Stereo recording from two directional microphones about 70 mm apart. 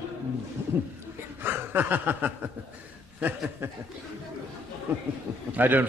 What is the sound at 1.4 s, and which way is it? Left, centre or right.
A man's voice, right.